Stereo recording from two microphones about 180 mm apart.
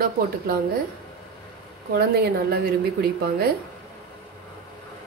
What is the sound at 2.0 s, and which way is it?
A woman's voice, 60° right (ahead or behind).